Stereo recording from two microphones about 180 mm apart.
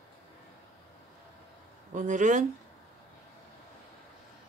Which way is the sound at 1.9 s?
45° right (ahead or behind).